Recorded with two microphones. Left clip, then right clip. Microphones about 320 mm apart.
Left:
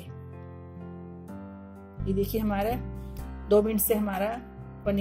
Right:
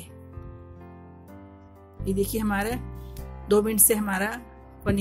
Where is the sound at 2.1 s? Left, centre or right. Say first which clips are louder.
Right 2 dB; centre.